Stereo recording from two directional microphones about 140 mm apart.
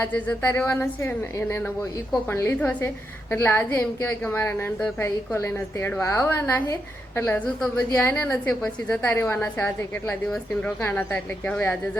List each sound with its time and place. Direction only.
0.0 s a woman's voice: 15° left (ahead or behind)